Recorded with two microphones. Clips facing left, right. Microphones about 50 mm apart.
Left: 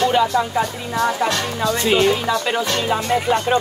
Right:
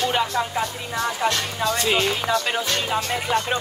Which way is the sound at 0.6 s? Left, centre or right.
Left.